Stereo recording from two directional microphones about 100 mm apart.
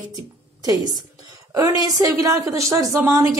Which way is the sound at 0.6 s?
40° right (ahead or behind).